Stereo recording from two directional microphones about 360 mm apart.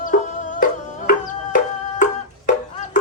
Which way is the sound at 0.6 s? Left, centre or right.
Left.